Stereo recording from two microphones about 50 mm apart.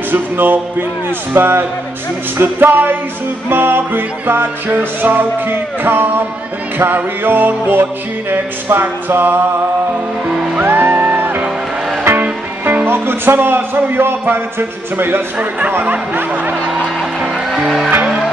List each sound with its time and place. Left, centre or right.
0.1 s music: right
9.1 s speech: right
10.6 s music: right
12.2 s music: right
12.8 s music: right
15.8 s speech: right